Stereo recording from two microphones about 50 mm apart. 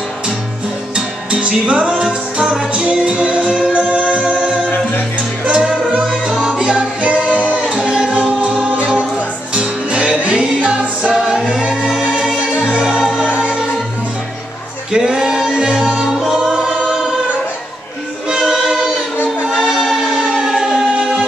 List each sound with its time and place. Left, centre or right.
0.9 s music: centre
5.4 s music: centre
11.1 s music: centre
12.0 s music: centre
14.9 s music: centre
16.4 s choir: centre
18.4 s a capella: centre
19.6 s music: centre